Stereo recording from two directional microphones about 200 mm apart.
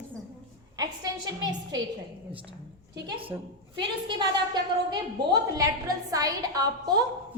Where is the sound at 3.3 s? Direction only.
15° right (ahead or behind).